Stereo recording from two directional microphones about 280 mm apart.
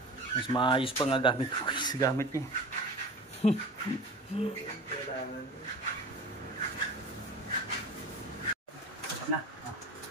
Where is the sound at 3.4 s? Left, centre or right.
Left.